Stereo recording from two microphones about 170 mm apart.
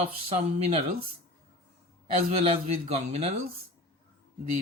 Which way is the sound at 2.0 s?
35° right (ahead or behind).